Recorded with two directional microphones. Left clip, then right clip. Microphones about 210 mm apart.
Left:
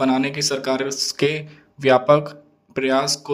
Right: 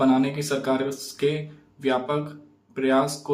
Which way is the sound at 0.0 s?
45° left (ahead or behind).